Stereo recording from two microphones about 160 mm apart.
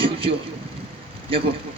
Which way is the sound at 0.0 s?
35° right (ahead or behind).